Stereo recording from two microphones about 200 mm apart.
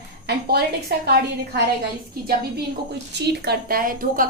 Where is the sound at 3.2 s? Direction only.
55° right (ahead or behind).